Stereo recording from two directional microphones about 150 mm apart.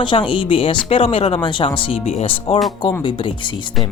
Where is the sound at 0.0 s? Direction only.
35° left (ahead or behind).